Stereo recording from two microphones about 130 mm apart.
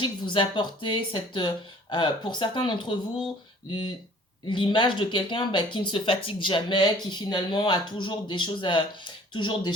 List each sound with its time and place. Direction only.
0.0 s speech: 40° left (ahead or behind)